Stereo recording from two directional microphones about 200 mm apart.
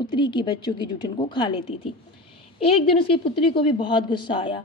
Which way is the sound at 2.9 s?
25° left (ahead or behind).